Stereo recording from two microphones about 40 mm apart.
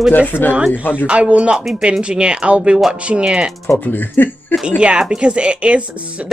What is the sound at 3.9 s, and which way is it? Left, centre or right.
Speech, left.